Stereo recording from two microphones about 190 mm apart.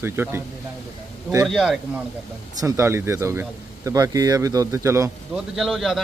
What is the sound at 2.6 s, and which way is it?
Speech, 15° right (ahead or behind).